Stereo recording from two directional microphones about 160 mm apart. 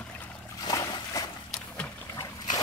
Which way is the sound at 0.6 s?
25° left (ahead or behind).